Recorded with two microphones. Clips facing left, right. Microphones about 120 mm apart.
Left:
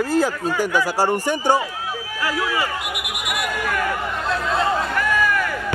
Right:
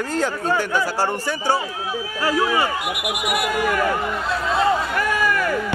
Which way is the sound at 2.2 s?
35° right (ahead or behind).